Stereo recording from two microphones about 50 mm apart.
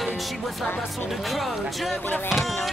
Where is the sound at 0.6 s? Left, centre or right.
Left.